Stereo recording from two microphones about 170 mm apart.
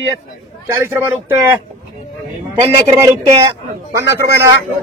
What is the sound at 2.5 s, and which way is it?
A man's voice, 15° right (ahead or behind).